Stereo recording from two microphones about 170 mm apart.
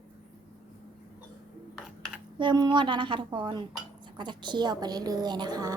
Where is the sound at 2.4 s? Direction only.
25° right (ahead or behind).